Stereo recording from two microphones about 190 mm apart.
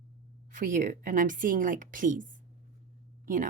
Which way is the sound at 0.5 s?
40° right (ahead or behind).